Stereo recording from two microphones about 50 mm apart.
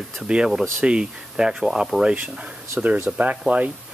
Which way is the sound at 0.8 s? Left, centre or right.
Centre.